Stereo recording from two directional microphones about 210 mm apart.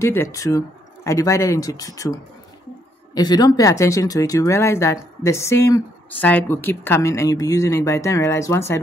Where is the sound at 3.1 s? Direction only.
20° left (ahead or behind).